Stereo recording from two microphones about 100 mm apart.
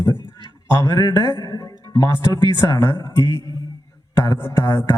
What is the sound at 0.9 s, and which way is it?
A man's voice, 40° left (ahead or behind).